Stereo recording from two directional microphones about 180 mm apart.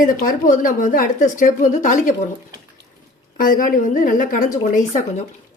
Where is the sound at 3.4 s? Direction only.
50° left (ahead or behind).